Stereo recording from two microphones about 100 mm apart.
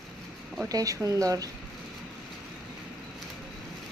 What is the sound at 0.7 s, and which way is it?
Speech, 35° right (ahead or behind).